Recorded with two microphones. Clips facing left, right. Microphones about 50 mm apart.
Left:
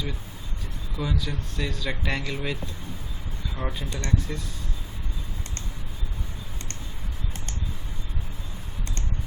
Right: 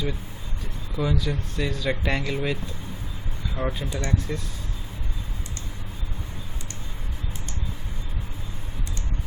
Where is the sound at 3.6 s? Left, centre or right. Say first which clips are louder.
Right 5 dB; centre.